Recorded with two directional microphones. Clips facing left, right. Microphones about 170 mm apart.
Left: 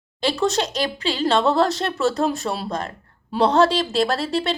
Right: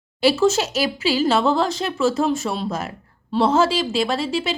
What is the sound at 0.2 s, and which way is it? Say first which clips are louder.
A woman's voice: right 4 dB; 5° right (ahead or behind).